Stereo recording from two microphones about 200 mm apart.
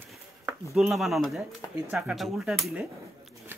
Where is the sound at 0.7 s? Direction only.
Centre (ahead or behind).